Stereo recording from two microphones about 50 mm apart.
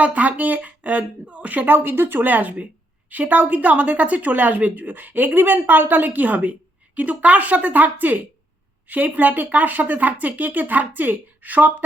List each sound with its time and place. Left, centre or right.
0.0 s speech: right
1.7 s a woman's voice: right